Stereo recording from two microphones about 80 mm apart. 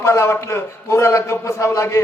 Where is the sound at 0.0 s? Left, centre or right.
Left.